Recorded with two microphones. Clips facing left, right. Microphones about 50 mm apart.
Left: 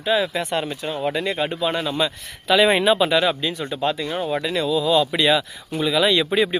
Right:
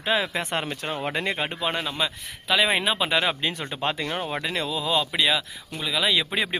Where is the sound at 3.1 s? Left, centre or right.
Right.